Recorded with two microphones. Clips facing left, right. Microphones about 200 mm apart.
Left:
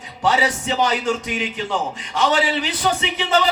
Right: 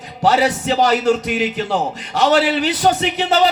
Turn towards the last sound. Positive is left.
turn(degrees=-40)  # may be behind; listen again after turning